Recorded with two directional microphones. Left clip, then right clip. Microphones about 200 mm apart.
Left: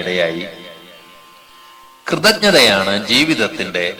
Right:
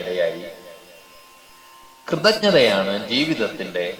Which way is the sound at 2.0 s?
20° left (ahead or behind).